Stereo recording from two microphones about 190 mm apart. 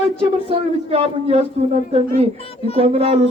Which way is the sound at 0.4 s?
30° right (ahead or behind).